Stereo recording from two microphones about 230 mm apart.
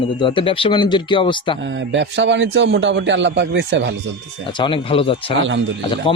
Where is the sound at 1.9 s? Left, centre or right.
Right.